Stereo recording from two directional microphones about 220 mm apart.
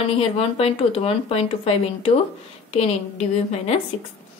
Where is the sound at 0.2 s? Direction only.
25° left (ahead or behind).